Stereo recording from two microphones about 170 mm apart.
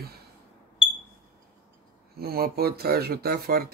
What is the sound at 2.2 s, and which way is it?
Speech, 65° right (ahead or behind).